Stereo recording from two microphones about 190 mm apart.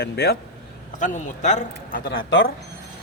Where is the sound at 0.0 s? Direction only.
55° left (ahead or behind).